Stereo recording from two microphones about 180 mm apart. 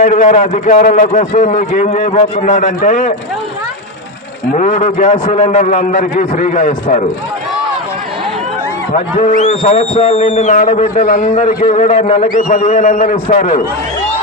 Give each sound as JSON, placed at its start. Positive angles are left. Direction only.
{"t": 0.0, "sound": "a man's voice", "side_deg": 45}
{"t": 4.5, "sound": "a man's voice", "side_deg": 40}
{"t": 9.1, "sound": "a man's voice", "side_deg": 40}